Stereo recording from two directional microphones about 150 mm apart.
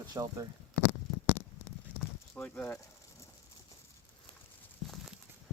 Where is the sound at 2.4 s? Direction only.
10° left (ahead or behind).